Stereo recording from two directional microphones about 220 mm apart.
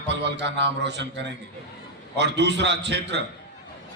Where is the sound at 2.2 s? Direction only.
50° right (ahead or behind).